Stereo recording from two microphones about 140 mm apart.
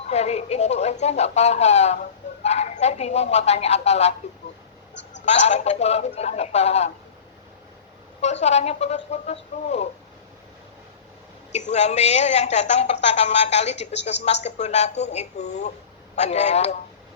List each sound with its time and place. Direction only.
0.1 s a woman's voice: 50° left (ahead or behind)
5.2 s a woman's voice: 55° left (ahead or behind)
8.2 s a woman's voice: 50° left (ahead or behind)
11.5 s a woman's voice: 55° left (ahead or behind)